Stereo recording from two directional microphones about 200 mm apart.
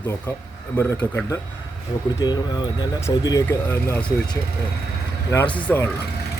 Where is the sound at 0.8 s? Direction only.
10° left (ahead or behind).